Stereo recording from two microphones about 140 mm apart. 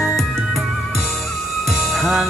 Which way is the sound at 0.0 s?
Centre (ahead or behind).